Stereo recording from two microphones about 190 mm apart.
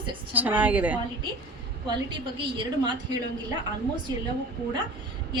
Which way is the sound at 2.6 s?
25° right (ahead or behind).